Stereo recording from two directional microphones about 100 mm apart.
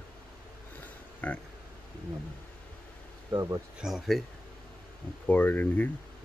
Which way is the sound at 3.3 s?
35° right (ahead or behind).